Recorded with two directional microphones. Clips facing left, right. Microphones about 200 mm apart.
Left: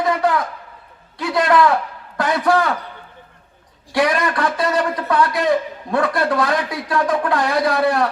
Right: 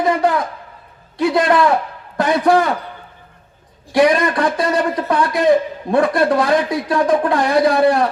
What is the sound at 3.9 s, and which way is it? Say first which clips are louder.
A man's voice: right 5 dB; 20° right (ahead or behind).